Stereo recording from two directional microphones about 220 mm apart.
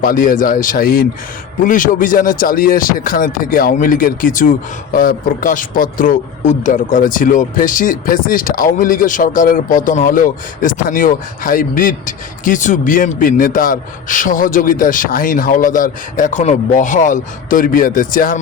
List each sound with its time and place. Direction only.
0.0 s speech: 40° left (ahead or behind)